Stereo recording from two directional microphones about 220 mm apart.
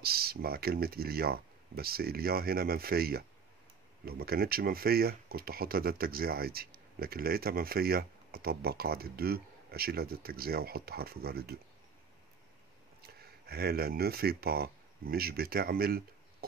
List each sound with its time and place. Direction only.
0.0 s speech: 45° right (ahead or behind)
13.0 s speech: 45° right (ahead or behind)